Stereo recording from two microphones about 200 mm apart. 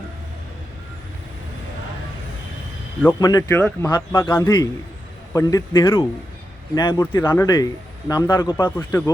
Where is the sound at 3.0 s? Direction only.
15° left (ahead or behind).